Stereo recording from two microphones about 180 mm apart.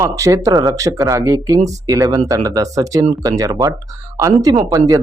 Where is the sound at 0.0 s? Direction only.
15° right (ahead or behind).